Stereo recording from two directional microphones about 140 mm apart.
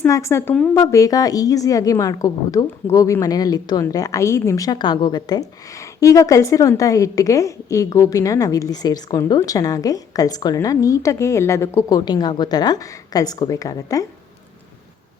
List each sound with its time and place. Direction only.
0.0 s a woman's voice: 20° left (ahead or behind)
0.5 s a woman's voice: 10° left (ahead or behind)
0.8 s a woman's voice: 20° left (ahead or behind)